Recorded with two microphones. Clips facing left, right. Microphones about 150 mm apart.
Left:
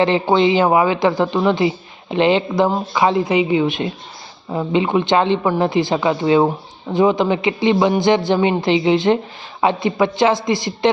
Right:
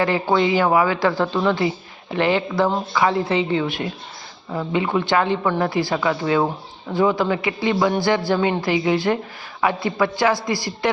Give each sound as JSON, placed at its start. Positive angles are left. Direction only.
{"t": 0.0, "sound": "speech", "side_deg": 20}